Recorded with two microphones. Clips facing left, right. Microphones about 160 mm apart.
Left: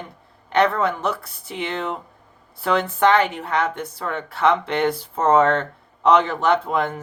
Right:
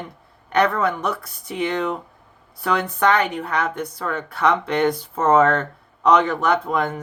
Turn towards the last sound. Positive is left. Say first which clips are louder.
# left 1 dB
turn(degrees=25)  # may be behind; listen again after turning